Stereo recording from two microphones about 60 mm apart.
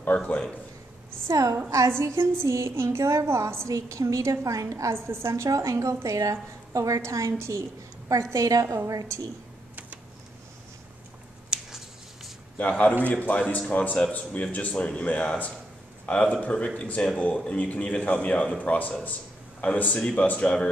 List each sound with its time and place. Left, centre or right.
1.3 s a woman's voice: right
2.0 s a woman's voice: right
5.3 s a woman's voice: right
8.1 s a woman's voice: right
11.5 s a sound: centre
12.5 s a man's voice: left
20.0 s a man's voice: centre